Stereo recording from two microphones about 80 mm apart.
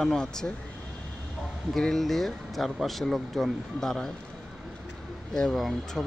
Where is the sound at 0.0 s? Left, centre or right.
Centre.